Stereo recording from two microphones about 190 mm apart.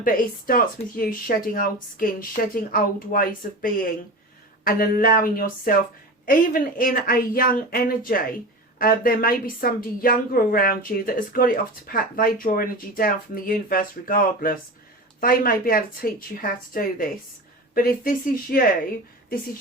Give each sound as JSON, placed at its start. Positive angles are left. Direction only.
{"t": 0.0, "sound": "speech", "side_deg": 45}